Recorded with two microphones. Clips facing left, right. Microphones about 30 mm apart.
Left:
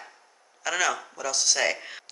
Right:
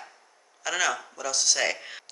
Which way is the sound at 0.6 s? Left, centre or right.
Centre.